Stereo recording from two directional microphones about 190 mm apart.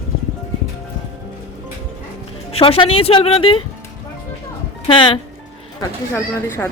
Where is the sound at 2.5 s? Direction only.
30° left (ahead or behind).